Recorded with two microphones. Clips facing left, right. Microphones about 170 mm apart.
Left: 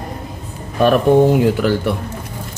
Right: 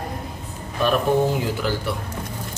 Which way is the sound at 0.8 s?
55° left (ahead or behind).